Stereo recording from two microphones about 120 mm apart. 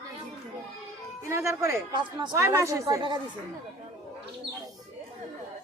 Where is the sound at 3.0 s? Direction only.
40° right (ahead or behind).